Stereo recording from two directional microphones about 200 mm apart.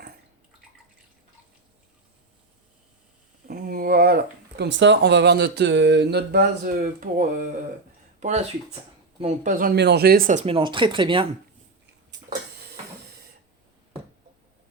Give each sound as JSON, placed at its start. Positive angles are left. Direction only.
{"t": 3.4, "sound": "speech", "side_deg": -45}